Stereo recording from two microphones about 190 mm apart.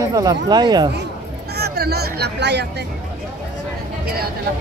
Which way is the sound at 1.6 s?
55° right (ahead or behind).